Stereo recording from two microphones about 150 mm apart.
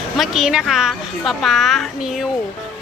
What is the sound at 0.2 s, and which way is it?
A woman's voice, 5° right (ahead or behind).